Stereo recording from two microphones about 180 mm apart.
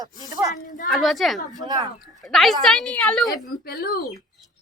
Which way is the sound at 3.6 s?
55° left (ahead or behind).